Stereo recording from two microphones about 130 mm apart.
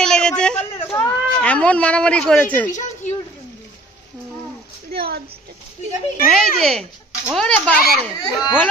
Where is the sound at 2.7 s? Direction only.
65° left (ahead or behind).